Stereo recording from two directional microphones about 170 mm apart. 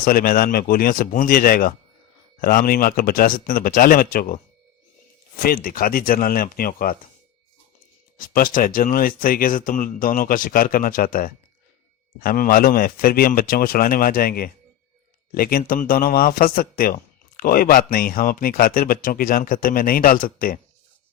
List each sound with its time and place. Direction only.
0.0 s speech: 55° left (ahead or behind)
5.4 s speech: 60° left (ahead or behind)
8.3 s speech: 55° left (ahead or behind)